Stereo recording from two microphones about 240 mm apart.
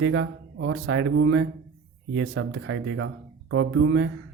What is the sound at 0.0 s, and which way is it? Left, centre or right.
Speech, right.